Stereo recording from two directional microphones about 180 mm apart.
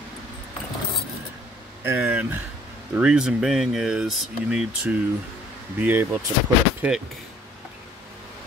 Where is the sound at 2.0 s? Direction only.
10° right (ahead or behind).